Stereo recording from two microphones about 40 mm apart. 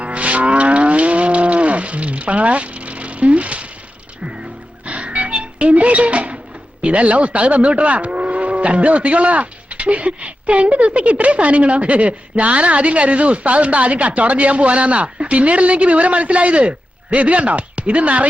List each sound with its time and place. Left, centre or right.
0.0 s cattle: right
4.9 s music: right
6.8 s speech: right